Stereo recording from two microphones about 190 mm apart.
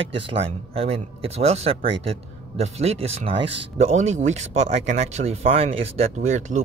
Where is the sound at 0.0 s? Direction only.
30° right (ahead or behind).